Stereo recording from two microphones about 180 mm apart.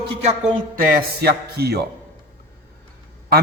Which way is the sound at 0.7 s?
55° right (ahead or behind).